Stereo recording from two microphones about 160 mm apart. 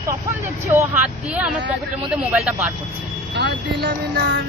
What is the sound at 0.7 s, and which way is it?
Speech, 15° right (ahead or behind).